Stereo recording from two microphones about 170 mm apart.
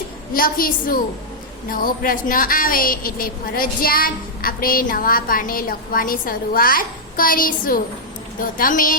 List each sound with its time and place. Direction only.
0.3 s a woman's voice: 55° left (ahead or behind)